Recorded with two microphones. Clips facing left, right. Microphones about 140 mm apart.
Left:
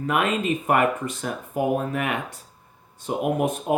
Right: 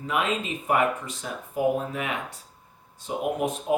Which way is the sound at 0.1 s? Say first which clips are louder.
Left 4 dB; 60° left (ahead or behind).